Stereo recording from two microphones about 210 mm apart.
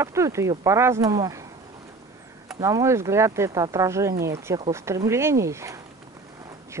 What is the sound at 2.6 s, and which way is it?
Speech, 15° right (ahead or behind).